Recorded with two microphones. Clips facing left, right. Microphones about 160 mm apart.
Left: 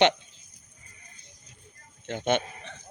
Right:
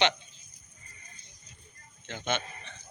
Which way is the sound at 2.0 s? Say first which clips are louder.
Left 7 dB; 55° left (ahead or behind).